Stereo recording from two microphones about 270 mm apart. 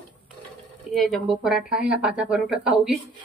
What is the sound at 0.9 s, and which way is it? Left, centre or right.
Speech, centre.